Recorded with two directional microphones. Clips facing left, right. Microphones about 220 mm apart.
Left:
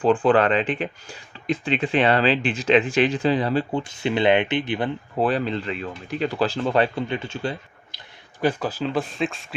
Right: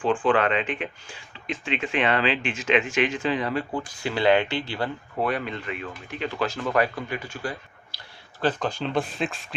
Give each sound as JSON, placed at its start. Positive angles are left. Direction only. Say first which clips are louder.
{"t": 0.0, "sound": "speech", "louder": "left 4 dB", "side_deg": 40}
{"t": 5.2, "sound": "speech", "louder": "left 5 dB", "side_deg": 30}
{"t": 7.9, "sound": "speech", "louder": "left 2 dB", "side_deg": 10}